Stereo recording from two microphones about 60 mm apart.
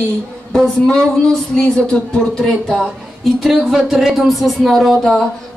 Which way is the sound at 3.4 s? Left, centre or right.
Centre.